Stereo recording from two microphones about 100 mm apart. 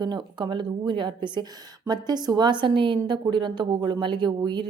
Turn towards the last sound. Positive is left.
turn(degrees=-50)  # may be behind; listen again after turning